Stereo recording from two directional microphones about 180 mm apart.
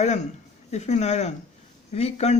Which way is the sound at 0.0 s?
40° left (ahead or behind).